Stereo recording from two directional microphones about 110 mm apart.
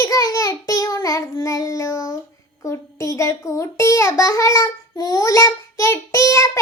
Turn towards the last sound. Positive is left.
turn(degrees=25)  # may be behind; listen again after turning